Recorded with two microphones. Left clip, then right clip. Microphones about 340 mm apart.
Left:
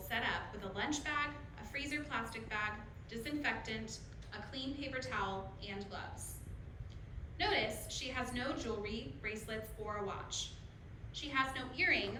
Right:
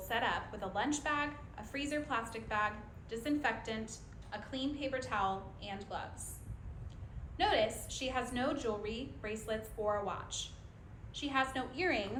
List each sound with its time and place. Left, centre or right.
0.1 s a woman's voice: centre
7.3 s a woman's voice: centre